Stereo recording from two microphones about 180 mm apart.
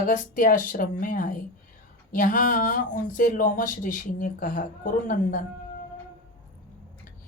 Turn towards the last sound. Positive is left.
turn(degrees=50)  # may be behind; listen again after turning